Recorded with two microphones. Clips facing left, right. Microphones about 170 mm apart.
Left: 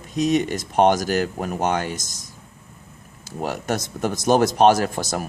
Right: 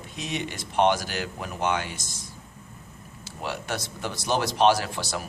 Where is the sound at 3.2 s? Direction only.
45° left (ahead or behind).